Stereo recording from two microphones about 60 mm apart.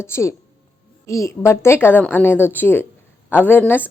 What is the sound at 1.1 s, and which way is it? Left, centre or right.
A woman's voice, left.